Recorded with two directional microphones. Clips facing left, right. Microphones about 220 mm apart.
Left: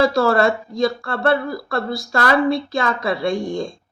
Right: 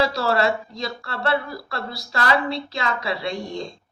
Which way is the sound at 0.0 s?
50° left (ahead or behind).